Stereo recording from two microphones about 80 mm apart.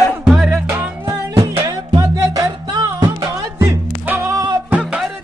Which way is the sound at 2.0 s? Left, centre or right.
Right.